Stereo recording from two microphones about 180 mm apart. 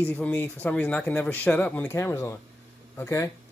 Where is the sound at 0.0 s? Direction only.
10° left (ahead or behind).